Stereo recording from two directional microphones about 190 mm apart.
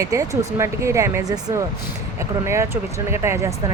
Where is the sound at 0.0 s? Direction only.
15° right (ahead or behind).